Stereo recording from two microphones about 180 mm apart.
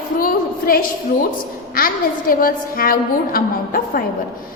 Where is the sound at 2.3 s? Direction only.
55° left (ahead or behind).